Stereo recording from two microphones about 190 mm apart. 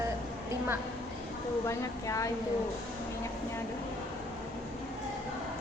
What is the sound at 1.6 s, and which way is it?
Speech, 15° left (ahead or behind).